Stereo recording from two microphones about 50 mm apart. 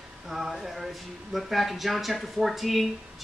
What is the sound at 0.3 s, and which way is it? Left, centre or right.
Speech, centre.